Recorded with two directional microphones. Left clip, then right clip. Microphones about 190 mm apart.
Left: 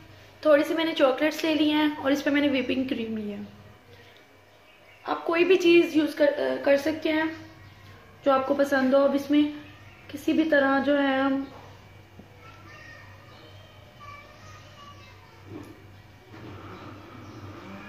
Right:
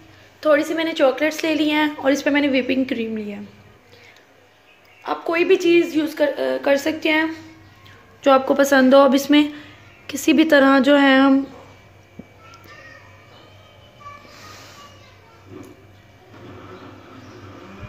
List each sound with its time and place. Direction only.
0.4 s a woman's voice: 35° right (ahead or behind)
5.0 s a woman's voice: 35° right (ahead or behind); by 11.3 s 55° right (ahead or behind)